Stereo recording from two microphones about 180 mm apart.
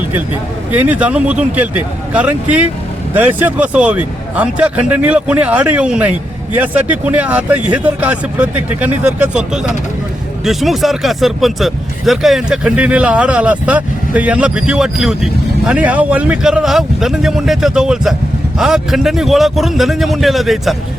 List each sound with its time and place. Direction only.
0.7 s speech: 10° right (ahead or behind)